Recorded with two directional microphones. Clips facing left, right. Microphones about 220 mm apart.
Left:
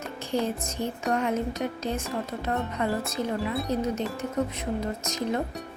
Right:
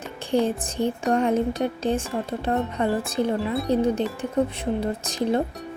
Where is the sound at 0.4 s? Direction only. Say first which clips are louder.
Right 5 dB; 30° right (ahead or behind).